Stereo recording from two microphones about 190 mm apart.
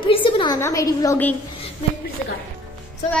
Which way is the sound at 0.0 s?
25° left (ahead or behind).